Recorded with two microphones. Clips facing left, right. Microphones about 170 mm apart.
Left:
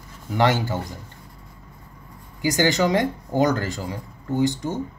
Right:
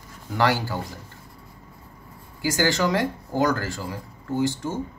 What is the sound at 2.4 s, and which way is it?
Speech, 20° left (ahead or behind).